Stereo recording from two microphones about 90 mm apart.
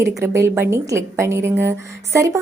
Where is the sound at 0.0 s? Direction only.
35° right (ahead or behind).